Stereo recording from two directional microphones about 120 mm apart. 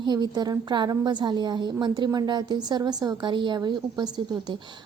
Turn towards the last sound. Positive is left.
turn(degrees=-35)  # may be behind; listen again after turning